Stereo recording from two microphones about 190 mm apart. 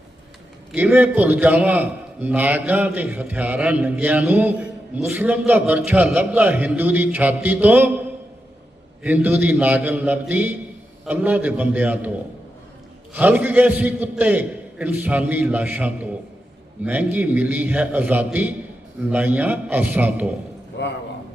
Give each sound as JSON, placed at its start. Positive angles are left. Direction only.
{"t": 0.7, "sound": "a man's voice", "side_deg": -5}
{"t": 9.0, "sound": "a man's voice", "side_deg": -10}
{"t": 13.1, "sound": "a man's voice", "side_deg": -10}
{"t": 20.8, "sound": "a man's voice", "side_deg": 65}